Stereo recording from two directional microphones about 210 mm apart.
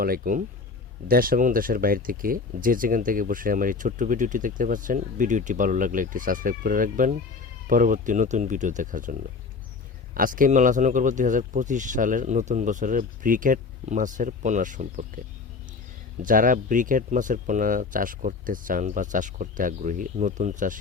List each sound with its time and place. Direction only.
0.0 s speech: 40° right (ahead or behind)
16.2 s speech: 40° right (ahead or behind)